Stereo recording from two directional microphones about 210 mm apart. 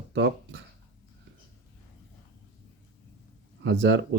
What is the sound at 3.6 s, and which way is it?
Speech, 60° right (ahead or behind).